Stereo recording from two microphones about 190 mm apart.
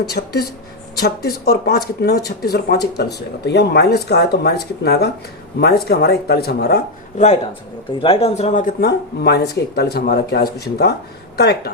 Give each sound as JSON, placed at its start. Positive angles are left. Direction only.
{"t": 0.1, "sound": "speech", "side_deg": 55}
{"t": 7.9, "sound": "speech", "side_deg": 30}
{"t": 8.9, "sound": "speech", "side_deg": 60}